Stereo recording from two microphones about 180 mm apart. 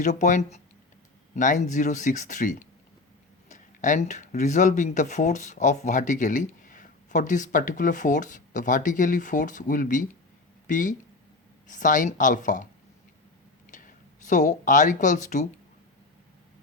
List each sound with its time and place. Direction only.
0.0 s speech: 45° left (ahead or behind)
13.7 s speech: 45° left (ahead or behind)